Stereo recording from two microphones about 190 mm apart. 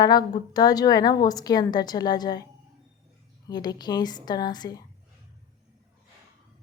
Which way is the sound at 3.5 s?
20° left (ahead or behind).